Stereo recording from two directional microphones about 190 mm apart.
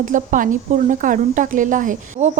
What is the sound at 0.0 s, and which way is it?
Speech, 45° right (ahead or behind).